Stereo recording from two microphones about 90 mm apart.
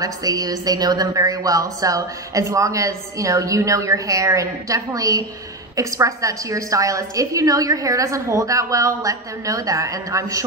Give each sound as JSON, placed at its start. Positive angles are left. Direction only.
{"t": 0.0, "sound": "a woman's voice", "side_deg": -45}